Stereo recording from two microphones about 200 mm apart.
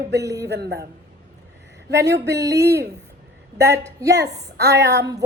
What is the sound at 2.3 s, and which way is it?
Speech, 15° right (ahead or behind).